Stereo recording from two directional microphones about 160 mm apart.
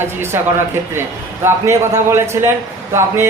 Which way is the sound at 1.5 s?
15° right (ahead or behind).